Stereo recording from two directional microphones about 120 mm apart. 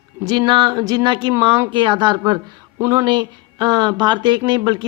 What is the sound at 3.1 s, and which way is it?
Speech, 35° right (ahead or behind).